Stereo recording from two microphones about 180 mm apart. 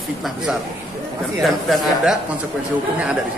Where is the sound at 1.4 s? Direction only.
Centre (ahead or behind).